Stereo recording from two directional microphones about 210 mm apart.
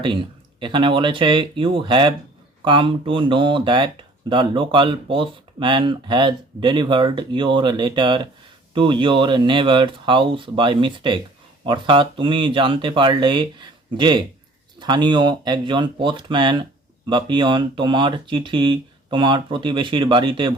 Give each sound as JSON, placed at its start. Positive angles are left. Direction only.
{"t": 0.6, "sound": "speech", "side_deg": -25}